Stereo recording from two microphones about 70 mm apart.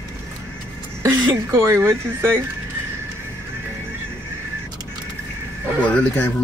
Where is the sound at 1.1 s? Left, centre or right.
Right.